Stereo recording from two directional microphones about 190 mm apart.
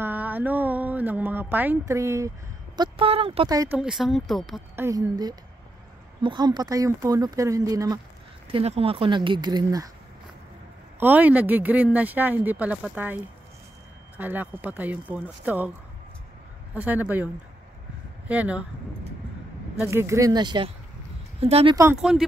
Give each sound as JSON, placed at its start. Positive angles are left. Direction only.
{"t": 0.0, "sound": "speech", "side_deg": -10}
{"t": 3.7, "sound": "speech", "side_deg": -5}
{"t": 4.7, "sound": "speech", "side_deg": -15}
{"t": 8.5, "sound": "speech", "side_deg": -30}
{"t": 11.0, "sound": "speech", "side_deg": -10}
{"t": 16.7, "sound": "speech", "side_deg": -10}
{"t": 18.3, "sound": "speech", "side_deg": -5}
{"t": 19.8, "sound": "speech", "side_deg": -15}
{"t": 22.1, "sound": "speech", "side_deg": -5}